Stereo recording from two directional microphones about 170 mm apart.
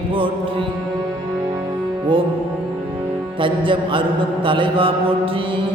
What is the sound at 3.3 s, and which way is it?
Music, 30° right (ahead or behind).